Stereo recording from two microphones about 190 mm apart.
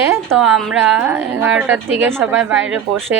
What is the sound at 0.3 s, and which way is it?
A woman's voice, centre (ahead or behind).